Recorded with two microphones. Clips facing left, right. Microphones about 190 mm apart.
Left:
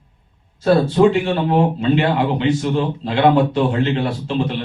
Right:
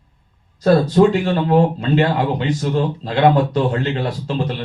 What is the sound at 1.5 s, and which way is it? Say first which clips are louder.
A man's voice: right 2 dB; 40° right (ahead or behind).